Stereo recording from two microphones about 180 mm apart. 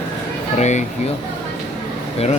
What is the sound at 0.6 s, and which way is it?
Speech, 40° left (ahead or behind).